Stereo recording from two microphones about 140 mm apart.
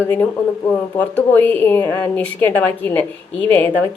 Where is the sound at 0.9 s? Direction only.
10° left (ahead or behind).